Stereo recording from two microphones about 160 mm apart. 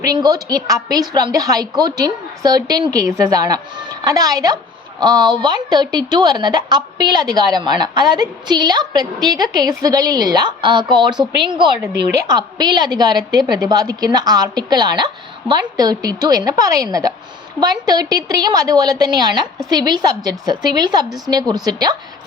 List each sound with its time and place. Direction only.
0.0 s a woman's voice: 25° right (ahead or behind)